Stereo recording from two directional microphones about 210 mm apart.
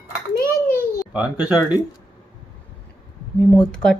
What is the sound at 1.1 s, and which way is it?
Speech, 5° right (ahead or behind).